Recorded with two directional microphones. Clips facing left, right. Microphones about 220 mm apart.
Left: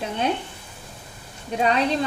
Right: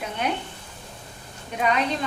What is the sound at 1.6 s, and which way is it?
Speech, 30° left (ahead or behind).